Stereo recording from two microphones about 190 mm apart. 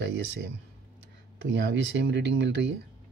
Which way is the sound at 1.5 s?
75° right (ahead or behind).